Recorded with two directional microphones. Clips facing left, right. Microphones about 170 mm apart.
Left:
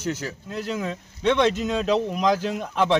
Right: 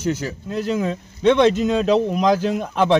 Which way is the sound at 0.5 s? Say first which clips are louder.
Right 7 dB; 35° right (ahead or behind).